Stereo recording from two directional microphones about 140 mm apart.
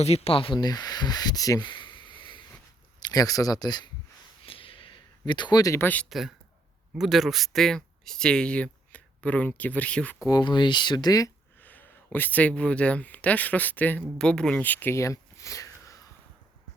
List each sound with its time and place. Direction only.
0.0 s speech: 50° left (ahead or behind)
3.1 s speech: 25° left (ahead or behind)
4.4 s a sound: 40° left (ahead or behind); by 6.1 s 15° left (ahead or behind)
6.1 s speech: centre (ahead or behind)
10.2 s speech: 30° left (ahead or behind)
11.6 s speech: 15° left (ahead or behind)